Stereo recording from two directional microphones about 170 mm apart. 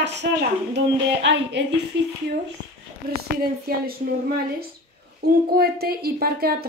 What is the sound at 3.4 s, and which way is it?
A woman's voice, 60° right (ahead or behind).